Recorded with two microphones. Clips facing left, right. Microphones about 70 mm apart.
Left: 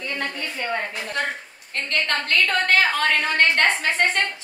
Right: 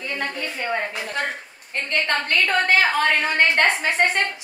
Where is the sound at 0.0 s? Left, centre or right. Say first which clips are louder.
Even; centre.